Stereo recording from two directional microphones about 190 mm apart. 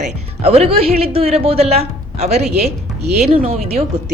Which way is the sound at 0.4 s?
35° right (ahead or behind).